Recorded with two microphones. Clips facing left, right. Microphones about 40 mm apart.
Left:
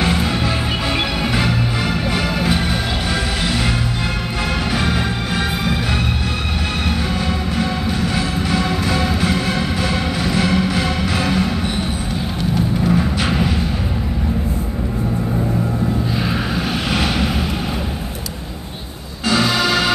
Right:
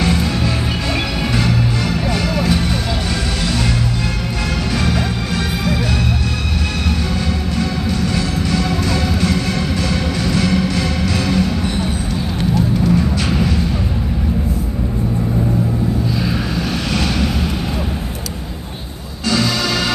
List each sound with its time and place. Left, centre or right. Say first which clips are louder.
0.0 s music: right 1 dB; left
2.1 s vehicle: right 1 dB; centre
4.7 s music: right 2 dB; centre
7.5 s music: right 1 dB; centre
19.2 s music: left 1 dB; centre